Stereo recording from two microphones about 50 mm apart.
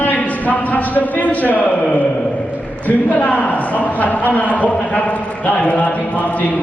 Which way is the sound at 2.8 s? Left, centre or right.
Left.